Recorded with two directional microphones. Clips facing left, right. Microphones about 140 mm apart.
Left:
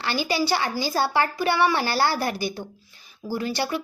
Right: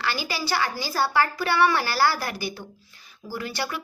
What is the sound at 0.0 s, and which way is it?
A woman's voice, 25° left (ahead or behind).